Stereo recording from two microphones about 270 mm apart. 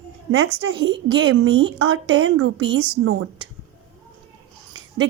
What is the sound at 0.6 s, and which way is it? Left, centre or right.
A woman's voice, right.